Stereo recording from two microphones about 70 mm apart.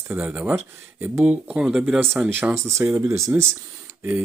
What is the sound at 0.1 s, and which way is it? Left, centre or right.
Speech, centre.